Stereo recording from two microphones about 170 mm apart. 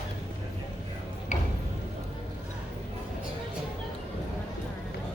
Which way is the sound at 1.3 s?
45° left (ahead or behind).